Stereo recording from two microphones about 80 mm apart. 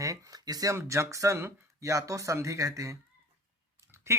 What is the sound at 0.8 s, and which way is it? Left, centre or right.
Speech, right.